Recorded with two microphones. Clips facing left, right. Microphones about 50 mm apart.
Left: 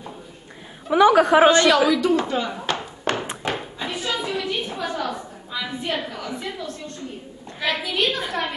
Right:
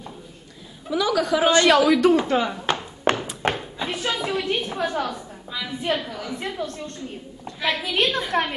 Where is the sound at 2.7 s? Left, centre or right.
Centre.